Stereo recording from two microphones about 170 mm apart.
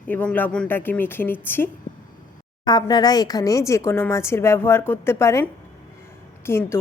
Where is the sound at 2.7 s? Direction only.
25° left (ahead or behind).